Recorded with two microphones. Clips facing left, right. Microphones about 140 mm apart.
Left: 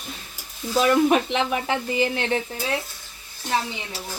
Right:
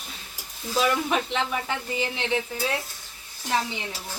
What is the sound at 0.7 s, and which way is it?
Speech, 55° left (ahead or behind).